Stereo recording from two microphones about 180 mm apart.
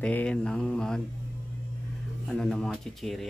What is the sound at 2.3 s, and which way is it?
Speech, centre (ahead or behind).